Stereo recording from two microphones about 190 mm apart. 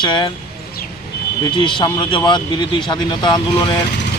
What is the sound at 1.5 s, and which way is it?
Speech, 25° left (ahead or behind).